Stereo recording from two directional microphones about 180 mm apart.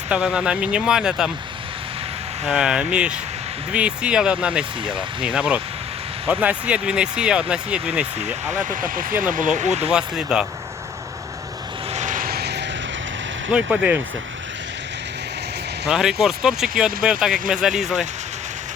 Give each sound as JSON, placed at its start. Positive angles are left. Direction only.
{"t": 0.1, "sound": "speech", "side_deg": -5}
{"t": 2.5, "sound": "speech", "side_deg": -5}
{"t": 8.7, "sound": "speech", "side_deg": -50}
{"t": 9.9, "sound": "speech", "side_deg": -5}
{"t": 11.9, "sound": "vehicle", "side_deg": -45}
{"t": 13.5, "sound": "speech", "side_deg": -5}
{"t": 15.9, "sound": "speech", "side_deg": -5}